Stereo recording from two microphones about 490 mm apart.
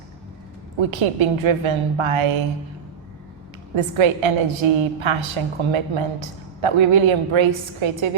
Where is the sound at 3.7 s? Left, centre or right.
Right.